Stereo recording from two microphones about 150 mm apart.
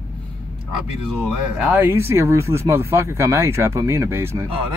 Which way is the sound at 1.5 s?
15° right (ahead or behind).